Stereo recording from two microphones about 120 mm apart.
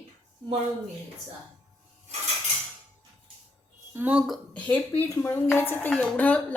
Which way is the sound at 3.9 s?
10° right (ahead or behind).